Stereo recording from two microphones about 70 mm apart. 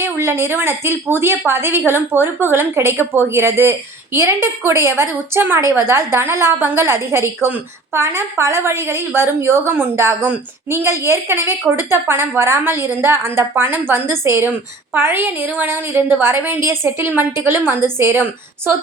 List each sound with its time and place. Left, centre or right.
0.0 s a woman's voice: right